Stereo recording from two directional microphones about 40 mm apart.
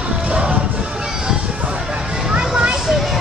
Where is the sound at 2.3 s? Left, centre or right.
Centre.